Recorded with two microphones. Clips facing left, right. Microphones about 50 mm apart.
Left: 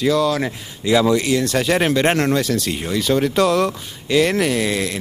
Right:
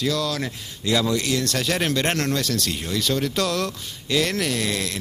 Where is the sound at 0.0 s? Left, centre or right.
Centre.